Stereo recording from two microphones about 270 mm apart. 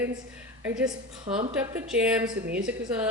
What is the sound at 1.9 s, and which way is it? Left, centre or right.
Speech, centre.